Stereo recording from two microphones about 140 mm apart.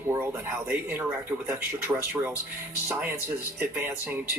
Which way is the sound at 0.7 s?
15° right (ahead or behind).